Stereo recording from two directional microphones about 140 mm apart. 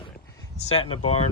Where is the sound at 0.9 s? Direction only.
45° left (ahead or behind).